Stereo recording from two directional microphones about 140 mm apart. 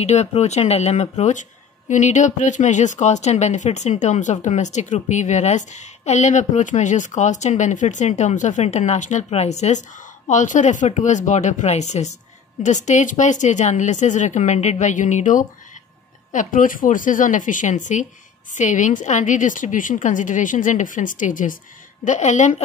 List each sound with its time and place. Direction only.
0.0 s a woman's voice: 50° left (ahead or behind)